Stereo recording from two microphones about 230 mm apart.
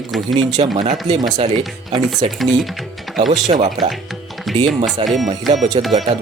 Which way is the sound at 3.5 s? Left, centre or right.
Right.